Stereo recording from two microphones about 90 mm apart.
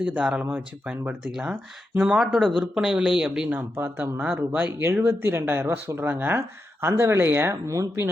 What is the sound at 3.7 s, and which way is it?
Speech, 25° right (ahead or behind).